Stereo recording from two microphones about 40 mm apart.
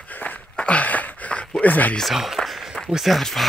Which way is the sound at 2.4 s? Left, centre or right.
Centre.